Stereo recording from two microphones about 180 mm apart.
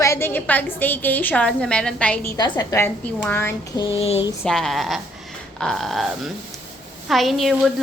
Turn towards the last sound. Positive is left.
turn(degrees=0)  # may be behind; listen again after turning